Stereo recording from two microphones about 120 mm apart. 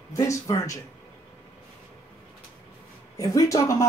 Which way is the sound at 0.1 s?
25° left (ahead or behind).